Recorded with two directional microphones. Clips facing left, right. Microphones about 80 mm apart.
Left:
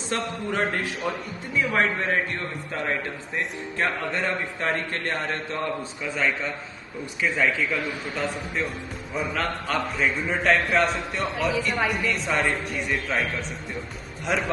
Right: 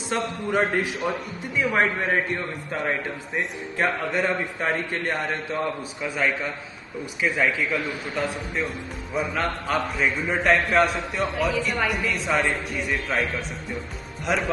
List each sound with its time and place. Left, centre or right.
0.1 s a man's voice: centre